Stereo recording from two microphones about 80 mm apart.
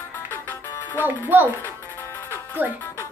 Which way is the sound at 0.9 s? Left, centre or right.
Right.